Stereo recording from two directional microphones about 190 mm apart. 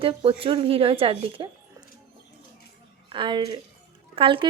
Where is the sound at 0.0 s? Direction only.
30° right (ahead or behind).